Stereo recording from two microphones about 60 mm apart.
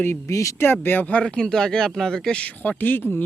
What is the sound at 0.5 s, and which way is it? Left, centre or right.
Speech, left.